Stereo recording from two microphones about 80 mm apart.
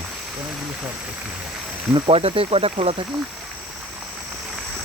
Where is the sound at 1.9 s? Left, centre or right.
Right.